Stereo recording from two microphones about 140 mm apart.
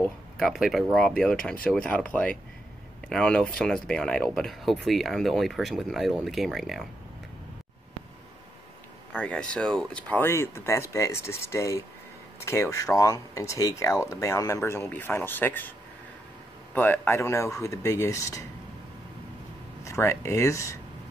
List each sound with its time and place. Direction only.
0.0 s speech: centre (ahead or behind)
9.1 s speech: 5° left (ahead or behind)
16.7 s speech: 15° left (ahead or behind)
19.8 s speech: 20° left (ahead or behind)